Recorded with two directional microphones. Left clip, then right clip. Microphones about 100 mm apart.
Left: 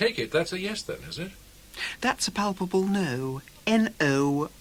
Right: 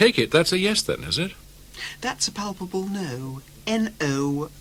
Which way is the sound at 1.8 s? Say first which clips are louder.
Even; 25° left (ahead or behind).